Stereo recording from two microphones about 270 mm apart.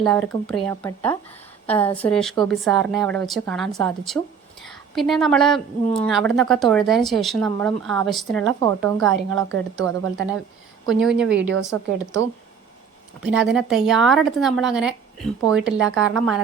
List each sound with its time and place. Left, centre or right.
0.0 s a woman's voice: centre
9.3 s a woman's voice: right
11.0 s a woman's voice: centre
11.6 s a woman's voice: centre
13.2 s a woman's voice: centre